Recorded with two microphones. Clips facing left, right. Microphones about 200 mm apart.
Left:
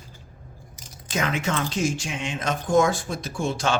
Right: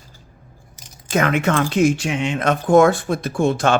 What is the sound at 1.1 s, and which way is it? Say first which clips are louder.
Speech: right 8 dB; 60° right (ahead or behind).